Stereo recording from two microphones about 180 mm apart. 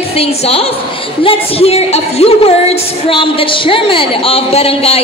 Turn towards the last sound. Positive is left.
turn(degrees=35)  # may be behind; listen again after turning